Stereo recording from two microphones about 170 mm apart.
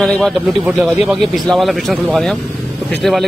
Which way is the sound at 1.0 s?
Centre (ahead or behind).